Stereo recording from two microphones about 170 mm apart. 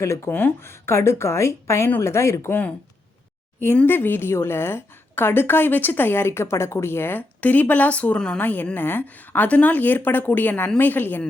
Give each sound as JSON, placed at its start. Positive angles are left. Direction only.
{"t": 0.0, "sound": "a woman's voice", "side_deg": 15}